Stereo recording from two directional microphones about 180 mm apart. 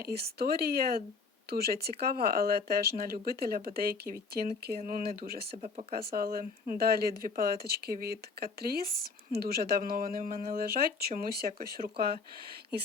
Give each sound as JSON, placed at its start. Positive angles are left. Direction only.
{"t": 0.0, "sound": "speech", "side_deg": -60}